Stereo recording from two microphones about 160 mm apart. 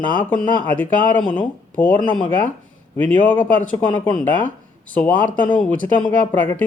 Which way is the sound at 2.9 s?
10° left (ahead or behind).